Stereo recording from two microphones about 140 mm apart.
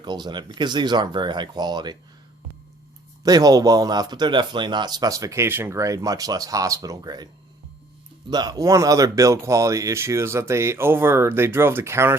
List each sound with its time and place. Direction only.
0.0 s speech: 30° right (ahead or behind)
3.2 s speech: 25° right (ahead or behind)
8.3 s speech: 30° right (ahead or behind)